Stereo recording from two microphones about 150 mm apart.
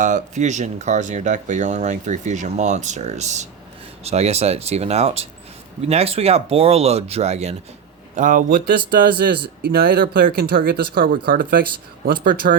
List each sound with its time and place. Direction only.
0.0 s speech: 55° right (ahead or behind)
8.1 s a man's voice: 60° right (ahead or behind)
8.9 s speech: 90° right; by 12.5 s 65° right (ahead or behind)